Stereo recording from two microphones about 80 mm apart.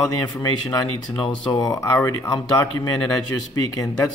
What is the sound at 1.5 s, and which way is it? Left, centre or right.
Speech, left.